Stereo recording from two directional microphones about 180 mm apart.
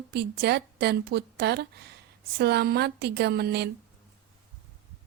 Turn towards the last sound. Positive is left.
turn(degrees=-65)  # may be behind; listen again after turning